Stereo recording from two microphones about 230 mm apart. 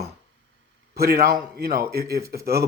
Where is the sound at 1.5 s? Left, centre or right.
Right.